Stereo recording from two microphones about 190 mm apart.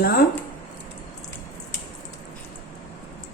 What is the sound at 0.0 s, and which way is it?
Speech, 50° left (ahead or behind).